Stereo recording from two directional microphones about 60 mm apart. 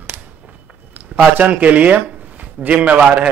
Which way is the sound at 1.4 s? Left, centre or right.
Right.